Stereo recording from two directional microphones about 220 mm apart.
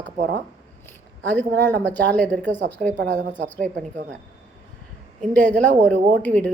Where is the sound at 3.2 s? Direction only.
35° right (ahead or behind).